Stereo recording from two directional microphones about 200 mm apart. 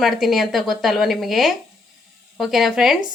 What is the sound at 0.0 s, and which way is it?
Speech, centre (ahead or behind).